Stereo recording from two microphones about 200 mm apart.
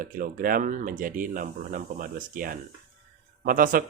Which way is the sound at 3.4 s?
45° right (ahead or behind).